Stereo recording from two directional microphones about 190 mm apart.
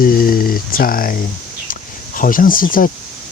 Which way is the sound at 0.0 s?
50° left (ahead or behind).